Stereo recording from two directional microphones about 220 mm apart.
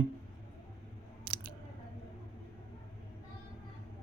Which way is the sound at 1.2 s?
45° right (ahead or behind).